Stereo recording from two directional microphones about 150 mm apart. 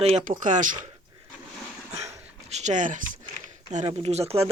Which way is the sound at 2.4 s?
50° right (ahead or behind).